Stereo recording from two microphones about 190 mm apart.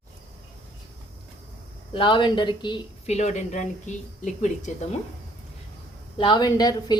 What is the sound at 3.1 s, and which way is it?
Speech, 35° left (ahead or behind).